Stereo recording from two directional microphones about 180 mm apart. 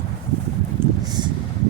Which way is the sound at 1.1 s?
25° right (ahead or behind).